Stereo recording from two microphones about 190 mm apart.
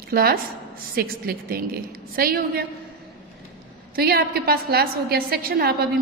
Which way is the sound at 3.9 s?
55° right (ahead or behind).